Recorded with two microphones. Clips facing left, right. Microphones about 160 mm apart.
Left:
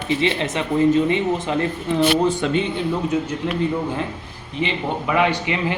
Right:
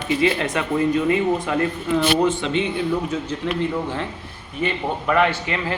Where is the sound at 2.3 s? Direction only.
40° left (ahead or behind).